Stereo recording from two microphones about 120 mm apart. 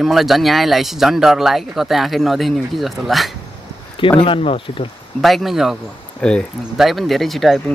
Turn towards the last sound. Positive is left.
turn(degrees=0)  # may be behind; listen again after turning